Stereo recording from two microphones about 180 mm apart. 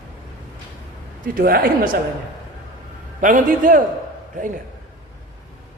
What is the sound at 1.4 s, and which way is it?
Speech, 55° right (ahead or behind).